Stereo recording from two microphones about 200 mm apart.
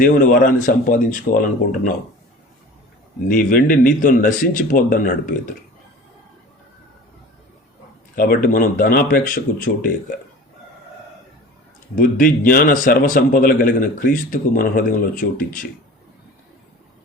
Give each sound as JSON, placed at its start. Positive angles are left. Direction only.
{"t": 0.0, "sound": "speech", "side_deg": 40}
{"t": 3.2, "sound": "a man's voice", "side_deg": 45}
{"t": 8.1, "sound": "a man's voice", "side_deg": 45}
{"t": 11.9, "sound": "a man's voice", "side_deg": 45}